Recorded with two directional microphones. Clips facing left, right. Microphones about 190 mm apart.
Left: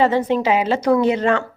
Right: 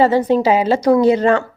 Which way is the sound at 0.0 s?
35° right (ahead or behind).